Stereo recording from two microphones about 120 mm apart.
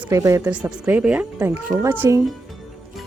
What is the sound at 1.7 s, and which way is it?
Cricket, 30° right (ahead or behind).